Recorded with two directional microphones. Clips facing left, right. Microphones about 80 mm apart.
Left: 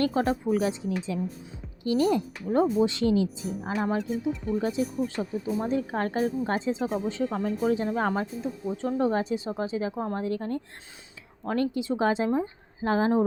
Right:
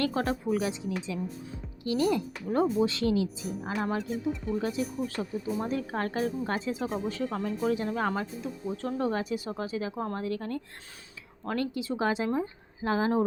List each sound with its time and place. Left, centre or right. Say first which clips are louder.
0.0 s speech: left 4 dB; left
3.9 s speech: left 3 dB; centre
4.6 s speech: left 3 dB; left
8.6 s speech: left 4 dB; centre